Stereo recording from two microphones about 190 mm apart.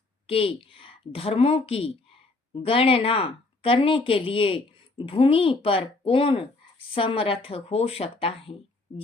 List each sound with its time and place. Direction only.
0.3 s a woman's voice: 30° left (ahead or behind)